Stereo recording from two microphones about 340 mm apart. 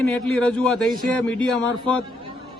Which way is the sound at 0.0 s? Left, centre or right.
Centre.